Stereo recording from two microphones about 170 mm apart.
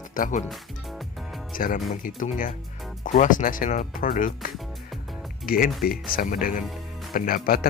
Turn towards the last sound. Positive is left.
turn(degrees=60)  # may be behind; listen again after turning